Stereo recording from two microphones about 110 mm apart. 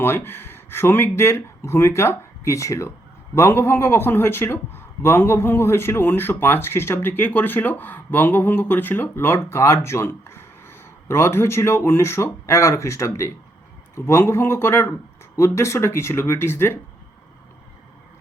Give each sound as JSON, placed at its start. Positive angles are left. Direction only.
{"t": 0.0, "sound": "a man's voice", "side_deg": 20}